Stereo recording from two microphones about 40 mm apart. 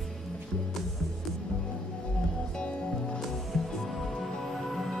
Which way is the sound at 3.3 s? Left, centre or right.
Centre.